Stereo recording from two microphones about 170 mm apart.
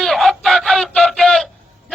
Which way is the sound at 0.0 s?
Centre (ahead or behind).